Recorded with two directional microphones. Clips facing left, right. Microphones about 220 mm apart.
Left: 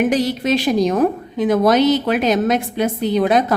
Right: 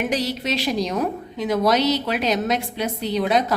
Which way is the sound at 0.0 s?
50° left (ahead or behind).